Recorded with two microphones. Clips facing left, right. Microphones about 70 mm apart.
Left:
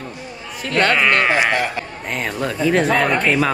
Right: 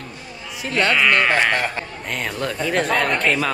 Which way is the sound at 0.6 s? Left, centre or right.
Left.